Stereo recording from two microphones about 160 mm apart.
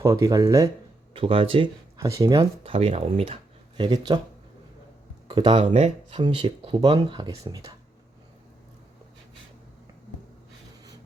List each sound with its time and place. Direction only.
0.0 s speech: 20° right (ahead or behind)
1.1 s speech: 35° right (ahead or behind)
2.0 s speech: 20° right (ahead or behind)
2.4 s speech: 35° right (ahead or behind)
3.8 s speech: 30° right (ahead or behind)
5.3 s speech: 30° right (ahead or behind)